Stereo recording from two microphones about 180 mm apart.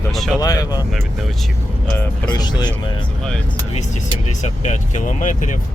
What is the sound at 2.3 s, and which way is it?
Speech, 25° left (ahead or behind).